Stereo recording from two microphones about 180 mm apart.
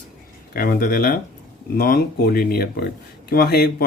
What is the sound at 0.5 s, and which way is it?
Speech, 55° left (ahead or behind).